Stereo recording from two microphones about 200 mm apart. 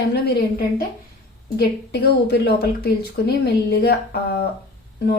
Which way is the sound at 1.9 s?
55° left (ahead or behind).